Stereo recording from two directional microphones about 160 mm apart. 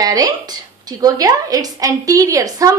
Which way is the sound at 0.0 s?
25° right (ahead or behind).